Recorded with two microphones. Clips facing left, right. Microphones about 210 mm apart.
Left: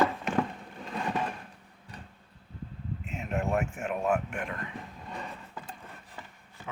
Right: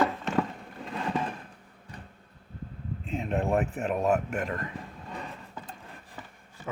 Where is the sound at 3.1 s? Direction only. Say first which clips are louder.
Right 4 dB; 30° right (ahead or behind).